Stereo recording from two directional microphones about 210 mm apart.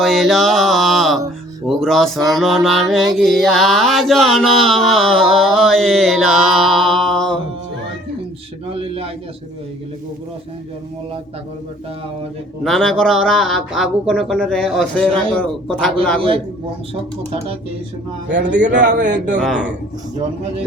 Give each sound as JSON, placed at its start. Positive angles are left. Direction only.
{"t": 0.0, "sound": "a sound", "side_deg": 0}
{"t": 1.6, "sound": "mantra", "side_deg": 0}
{"t": 8.7, "sound": "a sound", "side_deg": -25}
{"t": 12.6, "sound": "mantra", "side_deg": 0}
{"t": 18.3, "sound": "a man's voice", "side_deg": -55}
{"t": 19.4, "sound": "mantra", "side_deg": 0}